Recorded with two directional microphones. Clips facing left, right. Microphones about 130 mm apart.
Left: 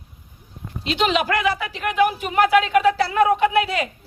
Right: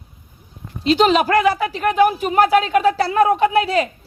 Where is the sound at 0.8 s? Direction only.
40° right (ahead or behind).